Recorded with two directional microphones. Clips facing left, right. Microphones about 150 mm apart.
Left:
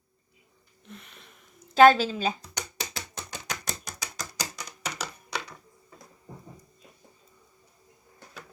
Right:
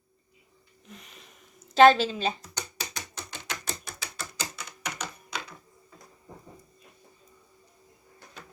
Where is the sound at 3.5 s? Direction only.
40° left (ahead or behind).